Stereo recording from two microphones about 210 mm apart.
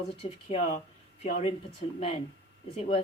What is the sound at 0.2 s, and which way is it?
Speech, 35° left (ahead or behind).